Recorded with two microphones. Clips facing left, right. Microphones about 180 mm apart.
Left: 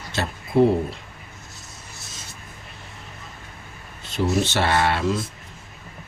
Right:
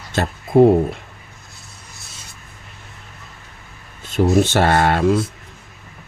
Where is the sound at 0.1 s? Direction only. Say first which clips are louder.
Right 6 dB; 50° right (ahead or behind).